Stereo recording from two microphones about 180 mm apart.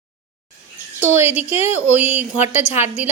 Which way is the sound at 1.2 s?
10° right (ahead or behind).